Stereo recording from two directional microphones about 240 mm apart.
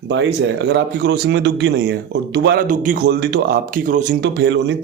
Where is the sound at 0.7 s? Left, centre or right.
Right.